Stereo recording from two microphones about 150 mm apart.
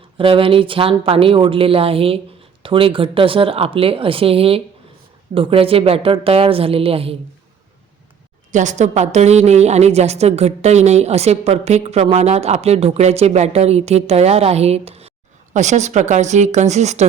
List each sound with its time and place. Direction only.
0.2 s speech: 35° right (ahead or behind)
8.5 s a woman's voice: 50° right (ahead or behind)